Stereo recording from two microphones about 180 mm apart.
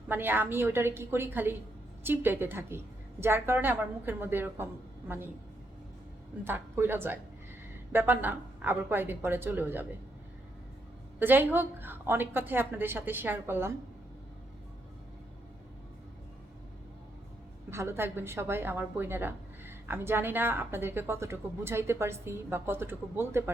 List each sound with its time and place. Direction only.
0.1 s a woman's voice: 10° right (ahead or behind)
6.4 s a woman's voice: 10° right (ahead or behind)
11.2 s a woman's voice: 10° right (ahead or behind)
17.7 s a woman's voice: 15° right (ahead or behind)